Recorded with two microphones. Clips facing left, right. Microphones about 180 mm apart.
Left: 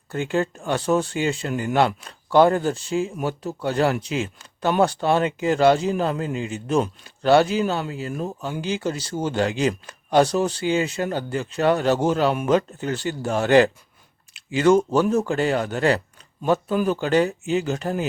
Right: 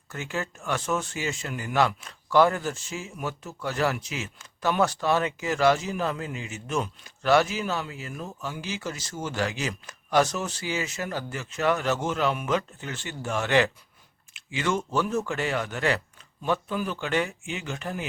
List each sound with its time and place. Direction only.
0.1 s speech: 30° left (ahead or behind)
16.4 s speech: 45° left (ahead or behind)